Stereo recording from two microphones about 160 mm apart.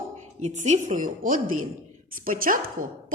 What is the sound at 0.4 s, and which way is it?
Speech, 45° right (ahead or behind).